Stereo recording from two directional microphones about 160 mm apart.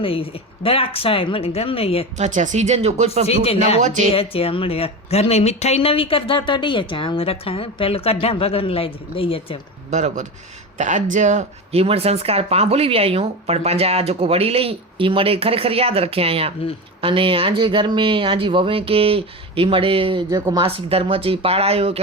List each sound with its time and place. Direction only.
0.0 s speech: 35° left (ahead or behind)
2.1 s speech: 50° right (ahead or behind)
3.2 s speech: 40° left (ahead or behind)
3.8 s speech: 50° right (ahead or behind)
4.1 s speech: 35° left (ahead or behind)
9.9 s speech: 45° right (ahead or behind)
20.3 s speech: 20° right (ahead or behind)
20.6 s speech: 35° right (ahead or behind)